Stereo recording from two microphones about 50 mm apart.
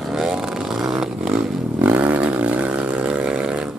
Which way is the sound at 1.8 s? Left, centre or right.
Right.